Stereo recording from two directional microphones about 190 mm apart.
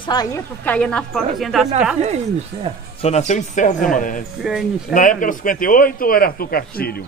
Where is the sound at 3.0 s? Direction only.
35° left (ahead or behind).